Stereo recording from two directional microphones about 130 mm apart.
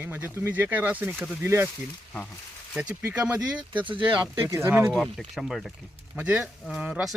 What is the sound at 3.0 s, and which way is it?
Speech, 10° right (ahead or behind).